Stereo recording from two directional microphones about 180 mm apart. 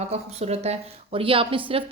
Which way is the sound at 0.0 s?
35° right (ahead or behind).